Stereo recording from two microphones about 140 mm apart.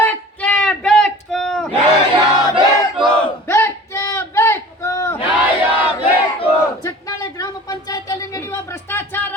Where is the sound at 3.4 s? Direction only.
20° left (ahead or behind).